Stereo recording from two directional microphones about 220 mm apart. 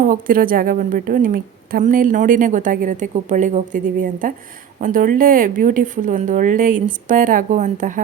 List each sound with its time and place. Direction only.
0.0 s a woman's voice: 40° right (ahead or behind)